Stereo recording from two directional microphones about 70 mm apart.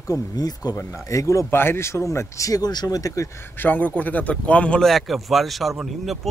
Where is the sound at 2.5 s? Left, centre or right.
Left.